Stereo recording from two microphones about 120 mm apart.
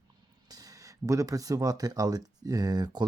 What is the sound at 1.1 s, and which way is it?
Speech, 25° right (ahead or behind).